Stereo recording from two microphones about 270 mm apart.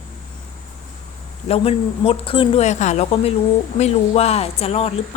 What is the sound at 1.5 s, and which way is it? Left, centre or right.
Speech, left.